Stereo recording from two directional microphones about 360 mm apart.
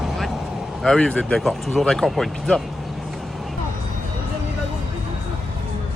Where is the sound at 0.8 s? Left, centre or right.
Centre.